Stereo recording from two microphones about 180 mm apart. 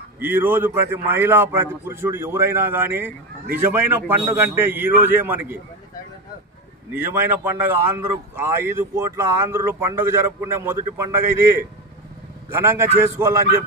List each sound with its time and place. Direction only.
0.2 s speech: 10° right (ahead or behind)
6.9 s speech: 10° right (ahead or behind)
12.4 s speech: 15° right (ahead or behind)